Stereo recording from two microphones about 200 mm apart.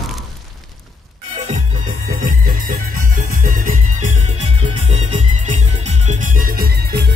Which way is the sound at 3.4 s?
40° right (ahead or behind).